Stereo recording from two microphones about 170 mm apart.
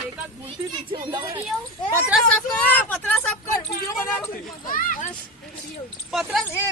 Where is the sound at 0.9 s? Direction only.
25° right (ahead or behind).